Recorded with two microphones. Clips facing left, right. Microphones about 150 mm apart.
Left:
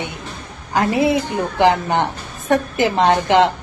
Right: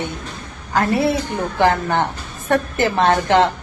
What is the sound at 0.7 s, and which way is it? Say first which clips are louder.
A woman's voice: left 1 dB; 15° left (ahead or behind).